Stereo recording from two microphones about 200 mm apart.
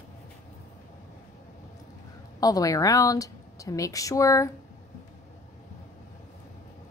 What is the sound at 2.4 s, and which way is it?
A woman's voice, 15° left (ahead or behind).